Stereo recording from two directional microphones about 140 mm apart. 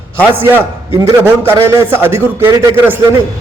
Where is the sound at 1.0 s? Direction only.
15° right (ahead or behind).